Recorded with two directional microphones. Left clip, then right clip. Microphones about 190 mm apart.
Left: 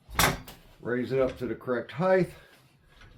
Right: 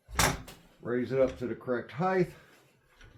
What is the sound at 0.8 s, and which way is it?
Speech, 10° left (ahead or behind).